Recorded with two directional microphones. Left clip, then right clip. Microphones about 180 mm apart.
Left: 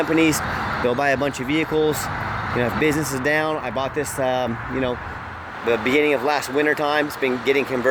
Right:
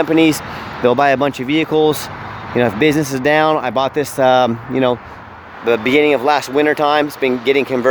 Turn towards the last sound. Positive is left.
turn(degrees=-40)  # may be behind; listen again after turning